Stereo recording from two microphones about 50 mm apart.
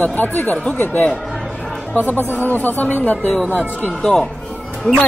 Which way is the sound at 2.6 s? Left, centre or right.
Left.